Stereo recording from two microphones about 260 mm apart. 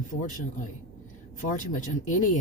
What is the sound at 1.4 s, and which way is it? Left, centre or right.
Speech, left.